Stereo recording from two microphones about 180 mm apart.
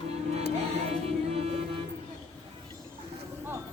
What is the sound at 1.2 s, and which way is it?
Music, 35° right (ahead or behind).